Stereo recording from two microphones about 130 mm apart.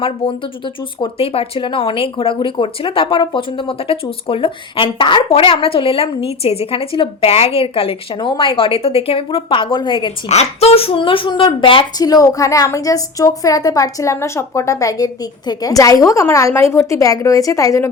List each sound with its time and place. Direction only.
0.0 s speech: 45° left (ahead or behind)
10.2 s a woman's voice: 55° left (ahead or behind)
12.0 s a woman's voice: 30° left (ahead or behind)